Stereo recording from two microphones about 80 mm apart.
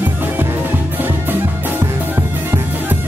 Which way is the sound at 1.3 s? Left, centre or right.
Right.